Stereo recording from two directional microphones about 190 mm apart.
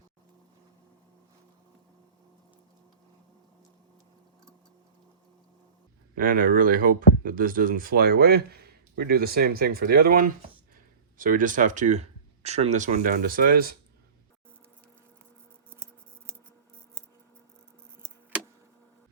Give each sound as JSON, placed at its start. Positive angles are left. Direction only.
{"t": 6.1, "sound": "speech", "side_deg": -45}
{"t": 15.7, "sound": "scissors", "side_deg": -10}
{"t": 18.0, "sound": "a sound", "side_deg": -5}